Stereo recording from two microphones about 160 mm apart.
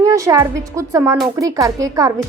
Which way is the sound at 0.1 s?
20° right (ahead or behind).